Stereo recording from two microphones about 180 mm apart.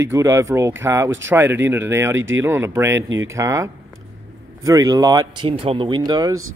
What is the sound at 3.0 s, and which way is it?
Speech, 90° right.